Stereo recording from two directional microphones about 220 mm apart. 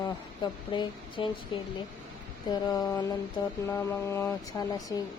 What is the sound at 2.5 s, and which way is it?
Speech, 15° left (ahead or behind).